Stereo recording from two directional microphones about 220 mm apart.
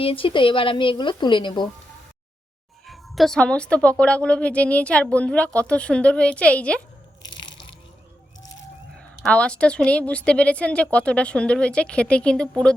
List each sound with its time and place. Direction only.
0.0 s a woman's voice: 25° left (ahead or behind)
2.8 s a woman's voice: centre (ahead or behind)
9.0 s a woman's voice: 5° left (ahead or behind)